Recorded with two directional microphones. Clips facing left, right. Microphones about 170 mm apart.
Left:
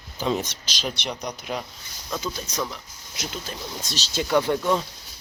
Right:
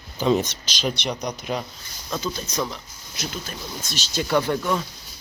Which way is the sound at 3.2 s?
25° left (ahead or behind).